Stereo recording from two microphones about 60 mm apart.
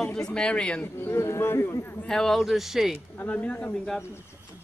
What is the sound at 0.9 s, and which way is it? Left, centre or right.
A man's voice, left.